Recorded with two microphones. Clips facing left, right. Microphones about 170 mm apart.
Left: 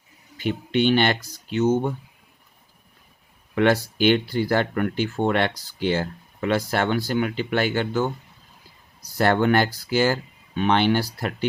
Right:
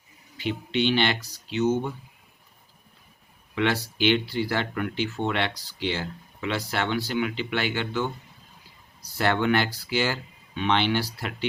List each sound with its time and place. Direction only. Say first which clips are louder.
0.3 s speech: left 4 dB; 50° left (ahead or behind)
3.5 s speech: left 6 dB; 45° left (ahead or behind)